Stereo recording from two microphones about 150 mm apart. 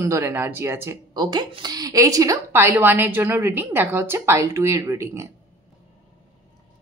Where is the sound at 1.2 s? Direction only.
30° right (ahead or behind).